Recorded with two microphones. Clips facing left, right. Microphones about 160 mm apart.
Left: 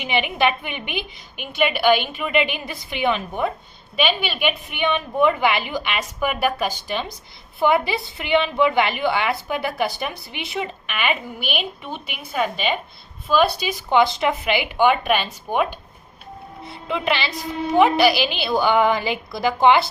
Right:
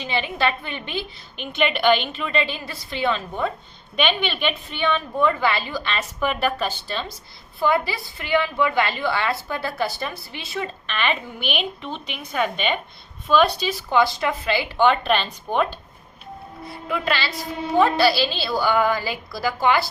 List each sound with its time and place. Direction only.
0.0 s a woman's voice: 15° left (ahead or behind)
16.6 s a woman's voice: 25° left (ahead or behind)